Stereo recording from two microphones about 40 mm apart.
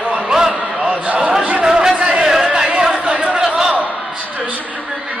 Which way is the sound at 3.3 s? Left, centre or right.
Centre.